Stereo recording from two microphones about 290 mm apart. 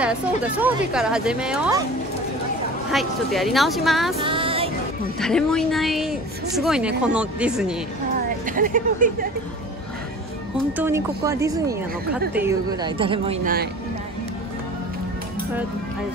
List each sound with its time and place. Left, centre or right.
0.0 s a woman's voice: centre
2.9 s a woman's voice: centre
4.2 s music: centre
5.2 s a woman's voice: centre
8.5 s speech: right
10.8 s speech: centre; by 13.7 s right